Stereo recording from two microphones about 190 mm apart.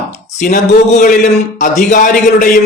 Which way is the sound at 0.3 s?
40° left (ahead or behind).